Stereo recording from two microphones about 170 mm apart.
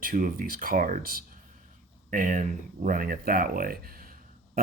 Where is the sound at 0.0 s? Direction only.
55° right (ahead or behind).